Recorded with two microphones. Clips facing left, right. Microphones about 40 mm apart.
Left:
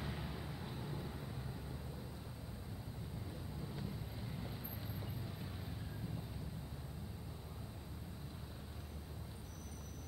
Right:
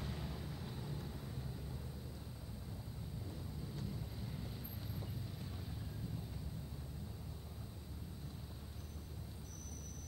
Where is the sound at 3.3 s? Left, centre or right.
Centre.